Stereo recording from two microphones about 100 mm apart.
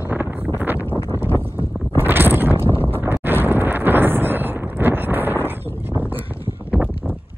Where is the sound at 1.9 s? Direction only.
20° right (ahead or behind).